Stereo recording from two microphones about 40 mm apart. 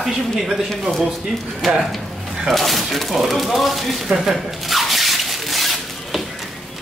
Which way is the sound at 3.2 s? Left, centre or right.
Centre.